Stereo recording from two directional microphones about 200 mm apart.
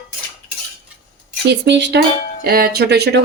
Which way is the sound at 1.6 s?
60° right (ahead or behind).